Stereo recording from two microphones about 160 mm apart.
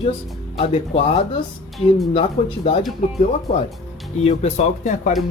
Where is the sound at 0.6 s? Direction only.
35° left (ahead or behind).